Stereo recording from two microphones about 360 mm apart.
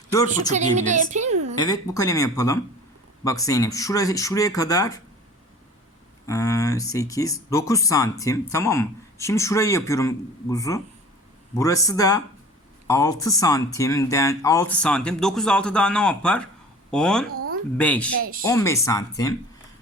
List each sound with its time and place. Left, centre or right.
0.5 s a woman's voice: centre
1.5 s speech: centre
6.2 s speech: centre
17.3 s a sound: right
17.7 s speech: centre
18.2 s a woman's voice: right
18.4 s speech: centre